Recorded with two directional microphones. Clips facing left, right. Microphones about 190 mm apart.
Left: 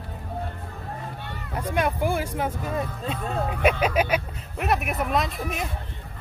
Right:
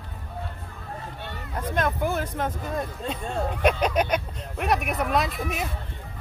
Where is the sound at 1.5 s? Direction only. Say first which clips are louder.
Left 1 dB; 10° left (ahead or behind).